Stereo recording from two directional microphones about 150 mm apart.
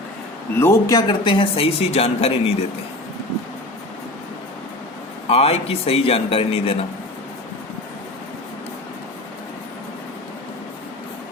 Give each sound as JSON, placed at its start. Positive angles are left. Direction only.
{"t": 0.6, "sound": "speech", "side_deg": 20}
{"t": 5.3, "sound": "speech", "side_deg": 40}